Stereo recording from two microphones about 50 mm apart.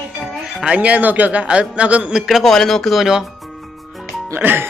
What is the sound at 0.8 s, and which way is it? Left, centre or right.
A man's voice, right.